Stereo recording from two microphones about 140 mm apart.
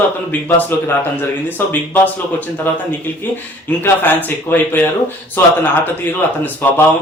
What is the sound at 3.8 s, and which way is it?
A man's voice, 15° left (ahead or behind).